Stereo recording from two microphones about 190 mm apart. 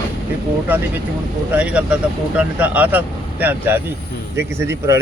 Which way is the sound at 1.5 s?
5° right (ahead or behind).